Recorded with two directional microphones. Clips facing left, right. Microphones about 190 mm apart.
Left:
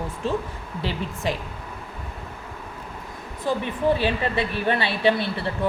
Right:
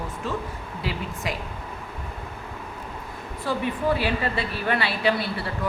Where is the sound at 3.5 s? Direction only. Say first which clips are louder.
Left 2 dB; 20° left (ahead or behind).